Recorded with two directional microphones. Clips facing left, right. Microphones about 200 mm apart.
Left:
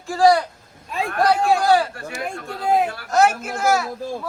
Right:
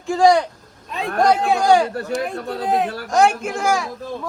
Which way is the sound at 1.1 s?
45° right (ahead or behind).